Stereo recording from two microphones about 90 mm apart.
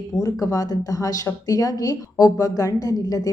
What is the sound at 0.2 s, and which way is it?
A woman's voice, 40° left (ahead or behind).